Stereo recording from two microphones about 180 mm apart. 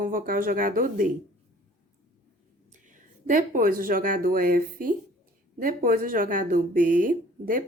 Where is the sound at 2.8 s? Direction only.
45° right (ahead or behind).